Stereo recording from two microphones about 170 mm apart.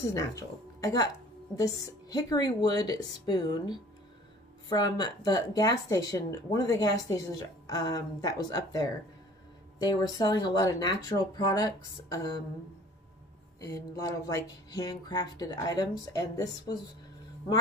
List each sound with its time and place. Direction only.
0.1 s speech: 20° left (ahead or behind)
13.6 s speech: 15° left (ahead or behind)